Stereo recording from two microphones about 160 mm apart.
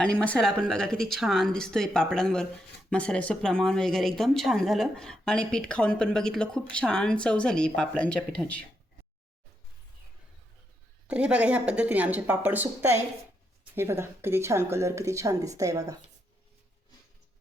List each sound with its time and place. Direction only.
0.0 s speech: 5° left (ahead or behind)
11.1 s speech: 10° right (ahead or behind)